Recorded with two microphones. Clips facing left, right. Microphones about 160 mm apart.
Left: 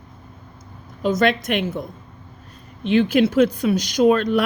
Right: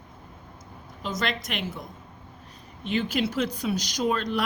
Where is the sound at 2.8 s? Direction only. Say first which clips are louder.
Left 10 dB; 70° left (ahead or behind).